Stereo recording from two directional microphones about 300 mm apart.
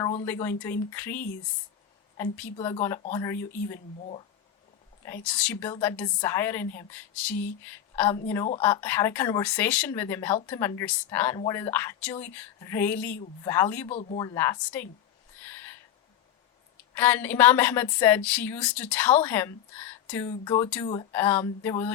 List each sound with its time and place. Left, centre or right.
0.0 s speech: centre
5.2 s speech: centre
13.9 s speech: left
16.9 s speech: centre